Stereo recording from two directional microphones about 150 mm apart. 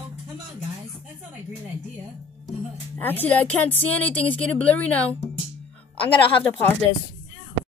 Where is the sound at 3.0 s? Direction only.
15° left (ahead or behind).